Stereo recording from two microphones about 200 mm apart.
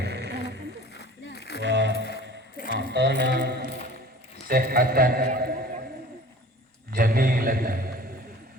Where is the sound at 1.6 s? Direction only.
60° right (ahead or behind).